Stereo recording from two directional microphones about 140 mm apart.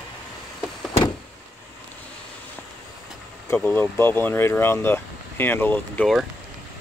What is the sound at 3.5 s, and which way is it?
Speech, 10° left (ahead or behind).